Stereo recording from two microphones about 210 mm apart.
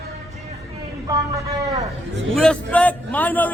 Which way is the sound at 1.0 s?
15° right (ahead or behind).